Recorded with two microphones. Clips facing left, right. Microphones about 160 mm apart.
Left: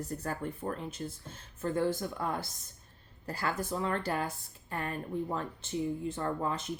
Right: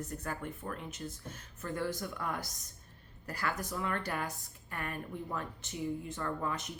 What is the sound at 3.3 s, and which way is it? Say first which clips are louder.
Speech: left 3 dB; 30° left (ahead or behind).